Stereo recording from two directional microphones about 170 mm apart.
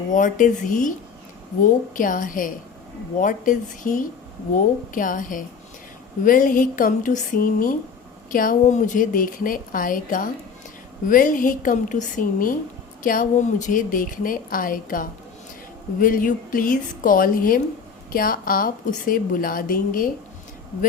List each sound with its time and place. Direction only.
0.1 s a woman's voice: 50° left (ahead or behind)